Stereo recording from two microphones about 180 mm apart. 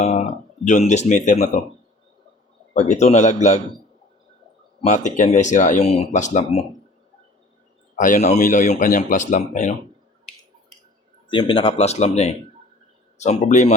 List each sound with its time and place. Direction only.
0.0 s speech: 40° left (ahead or behind)
2.7 s speech: 40° left (ahead or behind)
4.9 s speech: 45° left (ahead or behind)
7.9 s speech: 45° left (ahead or behind)
11.3 s speech: 25° left (ahead or behind)